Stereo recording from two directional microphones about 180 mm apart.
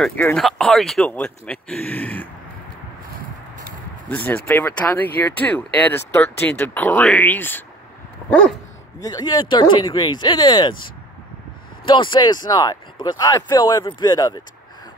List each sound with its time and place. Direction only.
0.0 s speech: 5° left (ahead or behind)
4.1 s speech: 10° left (ahead or behind)
9.0 s speech: 25° left (ahead or behind)
11.8 s speech: 25° left (ahead or behind)